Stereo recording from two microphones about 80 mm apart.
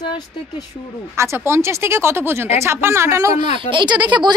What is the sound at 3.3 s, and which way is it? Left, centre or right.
Speech, right.